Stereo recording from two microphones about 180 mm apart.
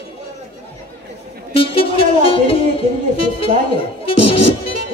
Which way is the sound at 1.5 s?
30° left (ahead or behind).